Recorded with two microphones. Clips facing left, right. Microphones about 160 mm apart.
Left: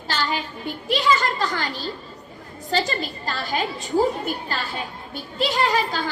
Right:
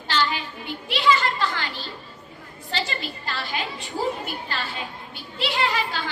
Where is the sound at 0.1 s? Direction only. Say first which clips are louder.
Right 1 dB; 45° left (ahead or behind).